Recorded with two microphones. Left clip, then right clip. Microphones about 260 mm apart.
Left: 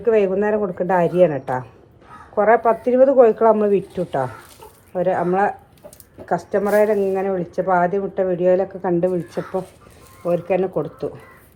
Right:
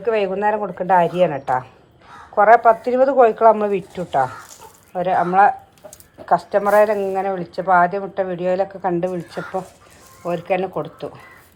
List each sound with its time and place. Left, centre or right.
0.0 s a woman's voice: centre